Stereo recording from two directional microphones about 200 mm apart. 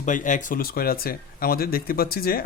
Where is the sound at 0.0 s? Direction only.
40° left (ahead or behind).